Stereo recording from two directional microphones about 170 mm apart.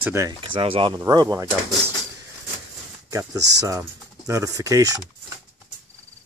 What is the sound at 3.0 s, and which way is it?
Speech, 20° right (ahead or behind).